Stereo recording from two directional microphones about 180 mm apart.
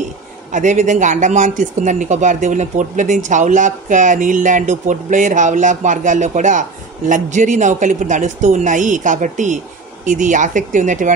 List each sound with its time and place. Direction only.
0.5 s speech: 45° right (ahead or behind)